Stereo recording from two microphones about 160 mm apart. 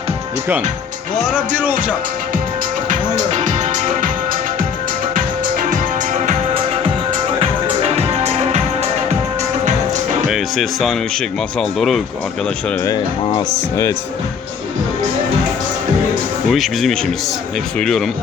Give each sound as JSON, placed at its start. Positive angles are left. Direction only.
{"t": 2.9, "sound": "music", "side_deg": -50}
{"t": 7.3, "sound": "music", "side_deg": -40}
{"t": 10.2, "sound": "speech", "side_deg": 0}
{"t": 12.8, "sound": "speech", "side_deg": 25}
{"t": 16.5, "sound": "speech", "side_deg": 0}